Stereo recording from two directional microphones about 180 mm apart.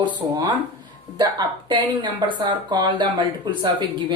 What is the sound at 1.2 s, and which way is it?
Speech, 25° right (ahead or behind).